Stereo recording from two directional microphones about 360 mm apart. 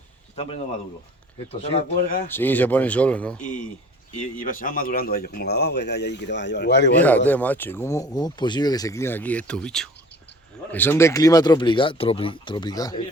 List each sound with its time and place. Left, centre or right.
1.7 s speech: centre
2.3 s speech: centre
4.1 s speech: left
7.3 s speech: centre